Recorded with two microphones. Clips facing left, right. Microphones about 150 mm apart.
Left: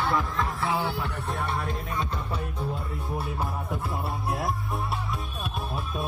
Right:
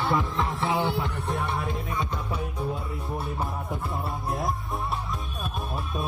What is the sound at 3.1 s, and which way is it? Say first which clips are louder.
Music: even; centre (ahead or behind).